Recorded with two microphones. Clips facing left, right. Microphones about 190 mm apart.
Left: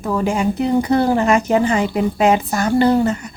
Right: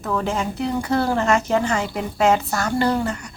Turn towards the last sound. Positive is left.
turn(degrees=20)  # may be behind; listen again after turning